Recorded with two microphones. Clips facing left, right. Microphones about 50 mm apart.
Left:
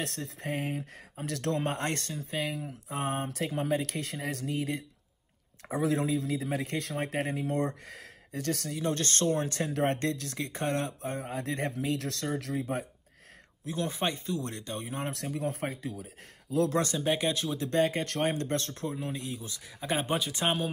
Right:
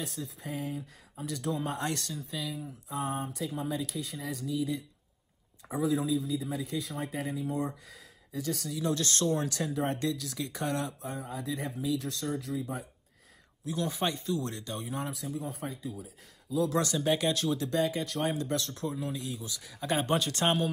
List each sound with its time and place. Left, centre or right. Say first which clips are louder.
0.0 s speech: left 3 dB; left
8.7 s speech: right 1 dB; left
9.8 s speech: left 3 dB; left
11.1 s speech: left 2 dB; left
13.7 s speech: even; left
15.0 s speech: left 3 dB; left
16.7 s speech: even; left
17.0 s speech: right 1 dB; left
17.6 s speech: left 2 dB; left
19.8 s speech: right 1 dB; centre